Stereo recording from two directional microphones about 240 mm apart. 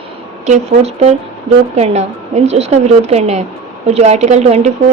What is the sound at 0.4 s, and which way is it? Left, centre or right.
Speech, right.